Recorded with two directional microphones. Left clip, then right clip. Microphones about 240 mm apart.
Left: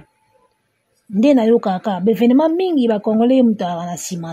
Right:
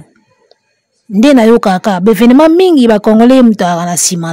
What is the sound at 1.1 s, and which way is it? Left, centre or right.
Speech, right.